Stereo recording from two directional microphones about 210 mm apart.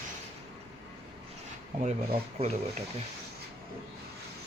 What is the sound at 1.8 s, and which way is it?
Speech, 35° right (ahead or behind).